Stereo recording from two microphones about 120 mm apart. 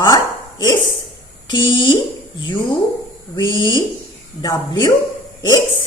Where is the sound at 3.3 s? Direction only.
45° left (ahead or behind).